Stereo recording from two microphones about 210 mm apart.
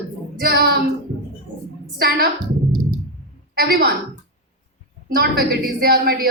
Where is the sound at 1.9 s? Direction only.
45° right (ahead or behind).